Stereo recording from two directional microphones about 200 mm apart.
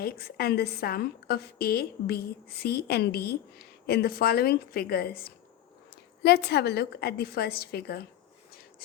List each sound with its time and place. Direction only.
0.0 s a woman's voice: 50° left (ahead or behind)